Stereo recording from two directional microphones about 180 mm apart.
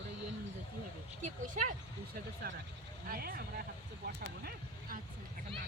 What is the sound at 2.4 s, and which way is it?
Speech, 60° right (ahead or behind).